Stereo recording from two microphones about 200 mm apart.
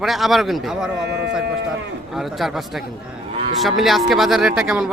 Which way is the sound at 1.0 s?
60° right (ahead or behind).